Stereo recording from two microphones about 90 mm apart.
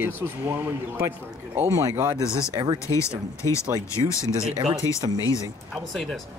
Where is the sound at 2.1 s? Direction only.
35° left (ahead or behind).